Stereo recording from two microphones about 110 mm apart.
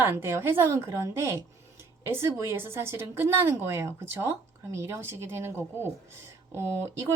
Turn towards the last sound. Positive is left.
turn(degrees=-25)  # may be behind; listen again after turning